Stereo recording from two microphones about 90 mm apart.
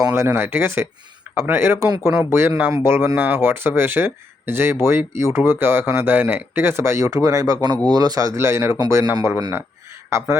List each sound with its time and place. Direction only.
0.2 s speech: 25° right (ahead or behind)